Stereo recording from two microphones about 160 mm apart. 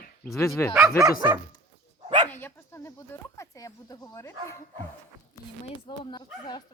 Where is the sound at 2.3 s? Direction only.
15° left (ahead or behind).